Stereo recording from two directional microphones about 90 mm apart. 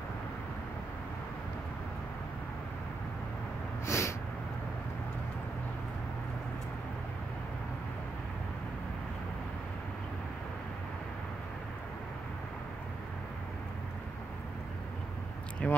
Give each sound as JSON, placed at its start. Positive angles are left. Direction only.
{"t": 3.8, "sound": "snort", "side_deg": 30}
{"t": 15.6, "sound": "speech", "side_deg": 10}